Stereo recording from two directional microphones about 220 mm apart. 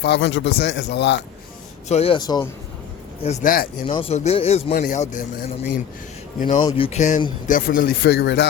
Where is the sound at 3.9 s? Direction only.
25° left (ahead or behind).